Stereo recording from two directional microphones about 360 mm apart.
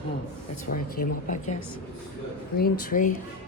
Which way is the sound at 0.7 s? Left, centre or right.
Left.